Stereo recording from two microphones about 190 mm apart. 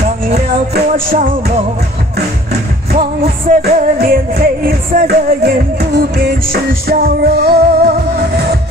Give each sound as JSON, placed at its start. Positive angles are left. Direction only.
{"t": 3.0, "sound": "music", "side_deg": -45}